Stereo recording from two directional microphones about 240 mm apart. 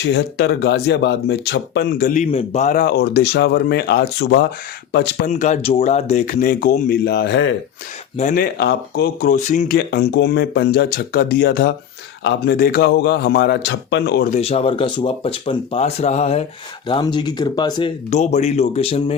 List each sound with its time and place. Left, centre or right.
0.1 s speech: left
5.3 s speech: left
8.2 s speech: left